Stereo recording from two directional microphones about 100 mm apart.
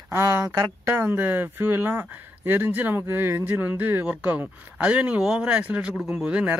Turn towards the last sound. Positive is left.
turn(degrees=-10)  # may be behind; listen again after turning